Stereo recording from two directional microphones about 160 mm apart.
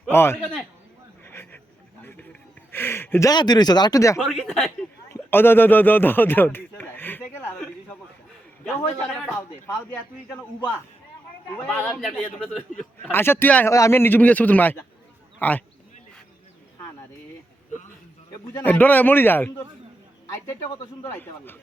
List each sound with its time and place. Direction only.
0.1 s a man's voice: 15° left (ahead or behind)
1.2 s a sound: 15° left (ahead or behind)
2.7 s speech: 15° left (ahead or behind)
4.2 s speech: centre (ahead or behind)
5.1 s speech: 15° left (ahead or behind)
8.6 s a man's voice: 10° left (ahead or behind)
11.5 s a man's voice: 10° left (ahead or behind)
13.1 s a man's voice: 15° left (ahead or behind)
18.6 s a man's voice: 10° left (ahead or behind)
21.0 s a man's voice: 15° left (ahead or behind)